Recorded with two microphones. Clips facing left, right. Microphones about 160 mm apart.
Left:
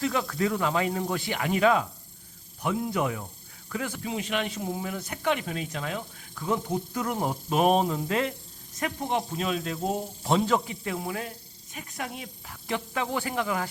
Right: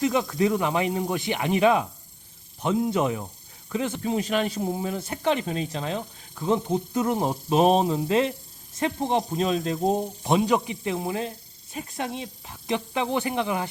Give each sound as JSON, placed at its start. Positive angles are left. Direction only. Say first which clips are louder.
{"t": 0.0, "sound": "speech", "louder": "right 4 dB", "side_deg": -20}
{"t": 4.0, "sound": "speech", "louder": "right 5 dB", "side_deg": -40}
{"t": 10.2, "sound": "speech", "louder": "right 2 dB", "side_deg": -15}